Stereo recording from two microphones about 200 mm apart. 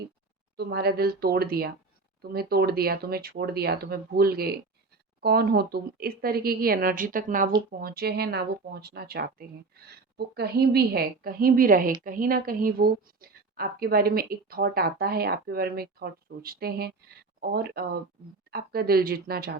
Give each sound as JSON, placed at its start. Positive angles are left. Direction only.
{"t": 0.5, "sound": "a woman's voice", "side_deg": -55}